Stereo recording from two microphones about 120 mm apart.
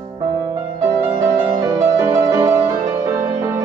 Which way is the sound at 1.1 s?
25° right (ahead or behind).